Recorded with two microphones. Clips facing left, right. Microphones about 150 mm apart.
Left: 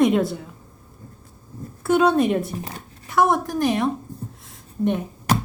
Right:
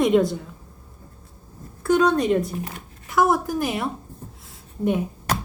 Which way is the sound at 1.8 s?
5° left (ahead or behind).